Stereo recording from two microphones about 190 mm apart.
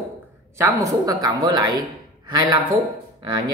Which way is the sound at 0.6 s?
20° right (ahead or behind).